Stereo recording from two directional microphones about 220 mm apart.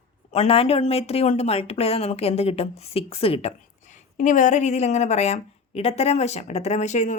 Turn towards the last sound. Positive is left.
turn(degrees=35)  # may be behind; listen again after turning